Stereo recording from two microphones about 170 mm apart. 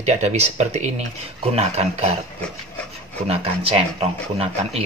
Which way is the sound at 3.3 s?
35° right (ahead or behind).